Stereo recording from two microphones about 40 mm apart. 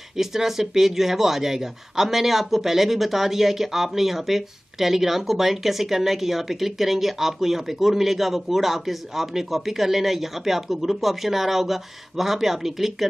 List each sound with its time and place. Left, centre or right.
0.1 s speech: centre